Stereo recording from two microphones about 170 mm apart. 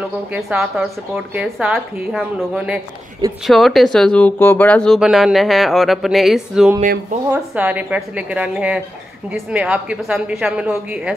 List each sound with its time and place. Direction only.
0.3 s speech: 5° right (ahead or behind)
6.8 s speech: 50° right (ahead or behind)
7.5 s a woman's voice: 10° right (ahead or behind)